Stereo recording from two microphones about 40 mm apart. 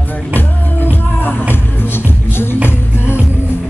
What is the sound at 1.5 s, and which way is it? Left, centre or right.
Music, left.